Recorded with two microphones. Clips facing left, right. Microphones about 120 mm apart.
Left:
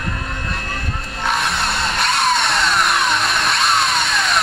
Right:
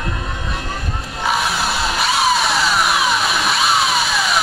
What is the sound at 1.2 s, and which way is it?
Chainsaw, centre (ahead or behind).